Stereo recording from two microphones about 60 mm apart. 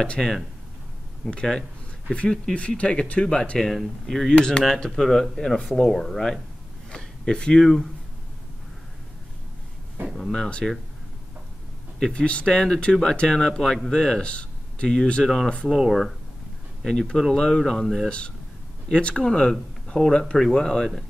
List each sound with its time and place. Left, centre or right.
0.0 s speech: centre
6.9 s a sound: centre
10.1 s speech: centre
12.0 s speech: centre
15.7 s speech: centre
16.8 s speech: centre
18.0 s speech: centre